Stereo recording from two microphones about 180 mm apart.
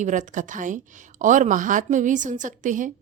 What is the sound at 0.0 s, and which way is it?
A woman's voice, 45° right (ahead or behind).